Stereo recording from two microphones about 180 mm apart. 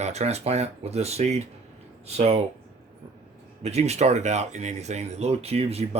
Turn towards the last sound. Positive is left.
turn(degrees=-35)  # may be behind; listen again after turning